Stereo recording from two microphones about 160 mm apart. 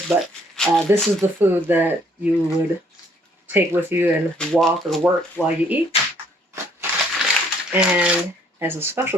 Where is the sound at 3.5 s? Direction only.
15° right (ahead or behind).